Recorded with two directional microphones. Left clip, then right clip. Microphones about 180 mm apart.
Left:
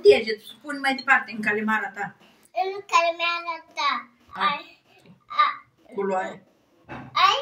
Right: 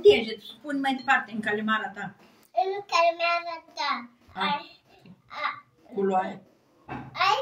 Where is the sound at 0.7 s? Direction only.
10° left (ahead or behind).